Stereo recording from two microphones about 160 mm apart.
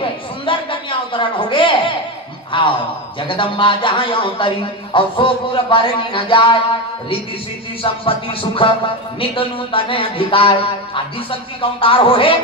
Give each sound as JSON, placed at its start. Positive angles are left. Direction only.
{"t": 0.5, "sound": "a sound", "side_deg": 35}
{"t": 2.5, "sound": "a man's voice", "side_deg": 30}
{"t": 7.8, "sound": "a man's voice", "side_deg": 35}